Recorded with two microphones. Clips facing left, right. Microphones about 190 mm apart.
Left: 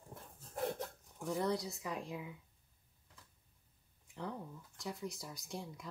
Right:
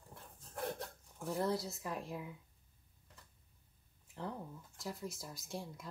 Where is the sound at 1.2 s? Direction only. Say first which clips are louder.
Even; centre (ahead or behind).